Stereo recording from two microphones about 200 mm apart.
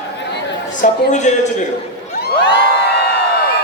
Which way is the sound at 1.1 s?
35° left (ahead or behind).